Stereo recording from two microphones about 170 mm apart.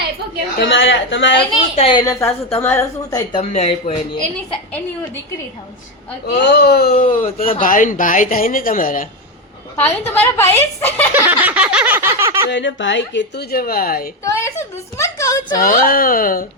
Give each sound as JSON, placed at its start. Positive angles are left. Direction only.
{"t": 0.6, "sound": "speech", "side_deg": 90}
{"t": 1.7, "sound": "a woman's voice", "side_deg": 30}
{"t": 3.3, "sound": "speech", "side_deg": 40}
{"t": 6.2, "sound": "a woman's voice", "side_deg": 80}
{"t": 9.7, "sound": "a woman's voice", "side_deg": 10}
{"t": 11.1, "sound": "a sound", "side_deg": -10}
{"t": 12.5, "sound": "speech", "side_deg": 90}
{"t": 14.3, "sound": "a woman's voice", "side_deg": 15}
{"t": 15.6, "sound": "speech", "side_deg": 55}